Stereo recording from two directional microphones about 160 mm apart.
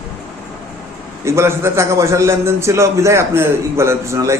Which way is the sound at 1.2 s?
15° right (ahead or behind).